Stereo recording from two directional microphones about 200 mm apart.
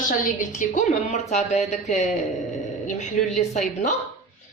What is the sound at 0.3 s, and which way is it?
Speech, 40° left (ahead or behind).